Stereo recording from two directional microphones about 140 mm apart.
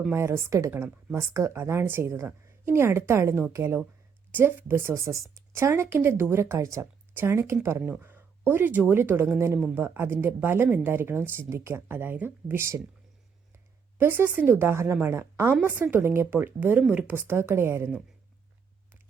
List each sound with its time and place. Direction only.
0.1 s a woman's voice: 20° right (ahead or behind)
14.0 s speech: 15° right (ahead or behind)